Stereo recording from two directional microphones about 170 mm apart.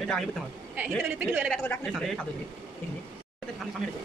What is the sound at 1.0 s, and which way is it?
Speech, 10° right (ahead or behind).